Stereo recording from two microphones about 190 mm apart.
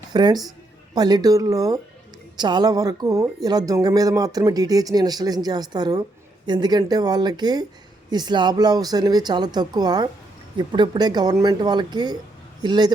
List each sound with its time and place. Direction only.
0.1 s speech: 20° right (ahead or behind)